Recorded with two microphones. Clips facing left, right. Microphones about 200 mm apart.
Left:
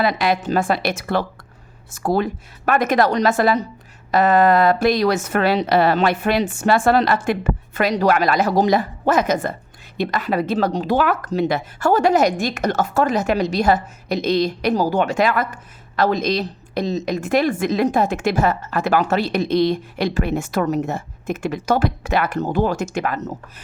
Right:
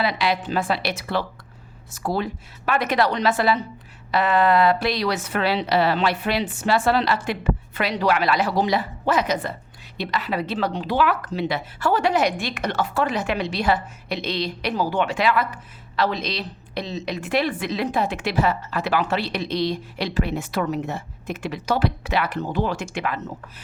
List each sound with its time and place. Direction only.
0.0 s speech: 45° left (ahead or behind)